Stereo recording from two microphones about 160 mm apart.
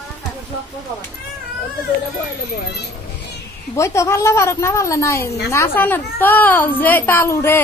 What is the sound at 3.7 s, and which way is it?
A child's voice, 20° left (ahead or behind).